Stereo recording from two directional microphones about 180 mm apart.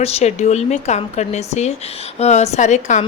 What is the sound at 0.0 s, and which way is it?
Speech, 35° left (ahead or behind).